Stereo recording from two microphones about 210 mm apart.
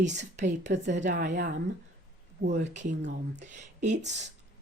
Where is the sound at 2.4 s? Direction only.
40° right (ahead or behind).